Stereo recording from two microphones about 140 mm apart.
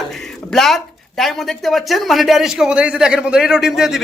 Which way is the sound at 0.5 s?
Centre (ahead or behind).